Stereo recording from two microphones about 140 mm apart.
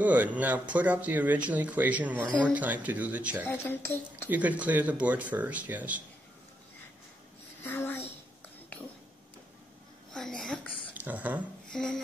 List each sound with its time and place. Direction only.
0.0 s speech: 10° right (ahead or behind)
3.4 s speech: 15° left (ahead or behind)
4.3 s speech: 10° right (ahead or behind)
7.6 s a sound: 15° left (ahead or behind)
10.1 s a sound: 5° left (ahead or behind)
11.0 s speech: 10° right (ahead or behind)
11.6 s speech: 5° left (ahead or behind)